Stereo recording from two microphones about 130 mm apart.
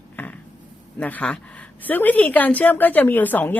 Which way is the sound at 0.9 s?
10° left (ahead or behind).